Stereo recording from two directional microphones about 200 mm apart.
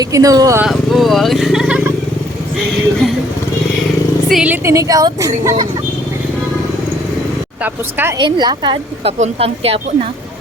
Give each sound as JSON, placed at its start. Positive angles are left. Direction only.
{"t": 0.0, "sound": "a woman's voice", "side_deg": -15}
{"t": 0.6, "sound": "speech", "side_deg": 0}
{"t": 4.3, "sound": "a woman's voice", "side_deg": -5}
{"t": 7.6, "sound": "a woman's voice", "side_deg": -10}
{"t": 8.2, "sound": "a woman's voice", "side_deg": -20}